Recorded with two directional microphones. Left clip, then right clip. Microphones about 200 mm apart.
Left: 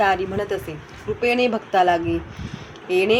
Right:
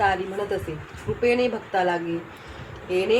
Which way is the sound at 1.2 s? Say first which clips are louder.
Left 2 dB; 50° left (ahead or behind).